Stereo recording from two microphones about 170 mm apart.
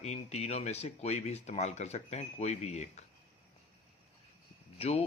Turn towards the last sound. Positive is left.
turn(degrees=35)  # may be behind; listen again after turning